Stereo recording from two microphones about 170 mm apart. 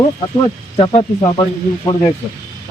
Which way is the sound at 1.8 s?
20° left (ahead or behind).